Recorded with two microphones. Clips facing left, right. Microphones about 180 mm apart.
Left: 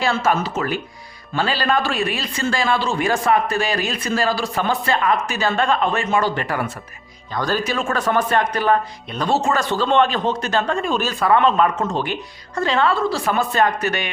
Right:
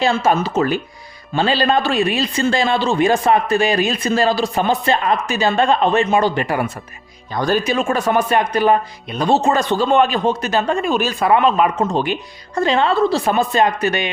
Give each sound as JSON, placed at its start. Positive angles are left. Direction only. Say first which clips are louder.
{"t": 0.0, "sound": "speech", "louder": "right 3 dB", "side_deg": -20}